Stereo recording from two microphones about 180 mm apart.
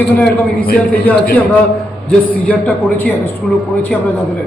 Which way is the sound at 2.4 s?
10° left (ahead or behind).